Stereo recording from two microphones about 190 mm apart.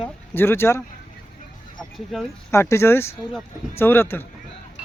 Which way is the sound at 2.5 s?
15° left (ahead or behind).